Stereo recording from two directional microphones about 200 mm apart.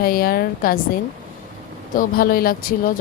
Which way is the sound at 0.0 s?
50° left (ahead or behind).